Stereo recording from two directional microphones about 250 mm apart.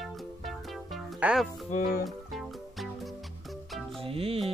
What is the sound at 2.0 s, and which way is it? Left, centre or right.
Music, centre.